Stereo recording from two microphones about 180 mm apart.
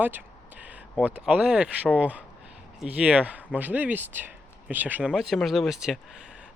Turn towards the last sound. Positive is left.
turn(degrees=0)  # may be behind; listen again after turning